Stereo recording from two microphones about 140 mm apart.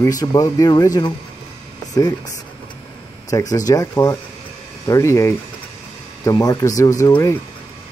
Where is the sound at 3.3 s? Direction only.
25° left (ahead or behind).